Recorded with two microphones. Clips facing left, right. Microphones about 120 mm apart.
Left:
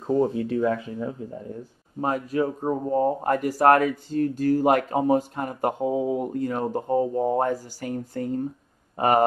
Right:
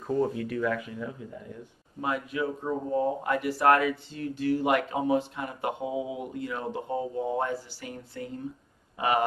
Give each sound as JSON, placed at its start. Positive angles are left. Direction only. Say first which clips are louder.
{"t": 0.0, "sound": "speech", "louder": "left 5 dB", "side_deg": 25}